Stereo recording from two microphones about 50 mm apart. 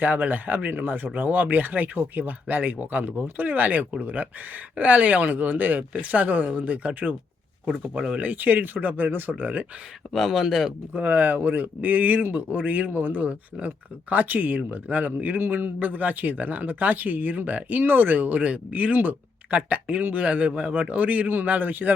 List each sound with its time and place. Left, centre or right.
0.0 s speech: right
7.7 s speech: centre
8.2 s speech: right
10.1 s speech: centre
10.9 s speech: right
21.0 s speech: right